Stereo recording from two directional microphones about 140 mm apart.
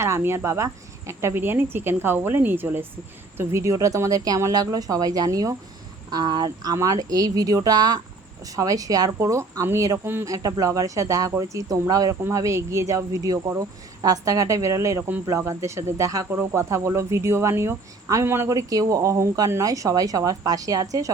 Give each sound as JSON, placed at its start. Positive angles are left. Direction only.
{"t": 0.0, "sound": "speech", "side_deg": -20}